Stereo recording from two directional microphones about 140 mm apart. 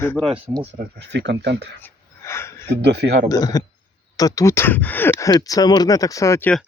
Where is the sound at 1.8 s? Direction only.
15° left (ahead or behind).